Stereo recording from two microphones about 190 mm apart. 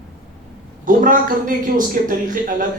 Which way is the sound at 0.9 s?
45° right (ahead or behind).